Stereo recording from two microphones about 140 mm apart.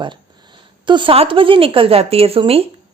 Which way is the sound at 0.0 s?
35° right (ahead or behind).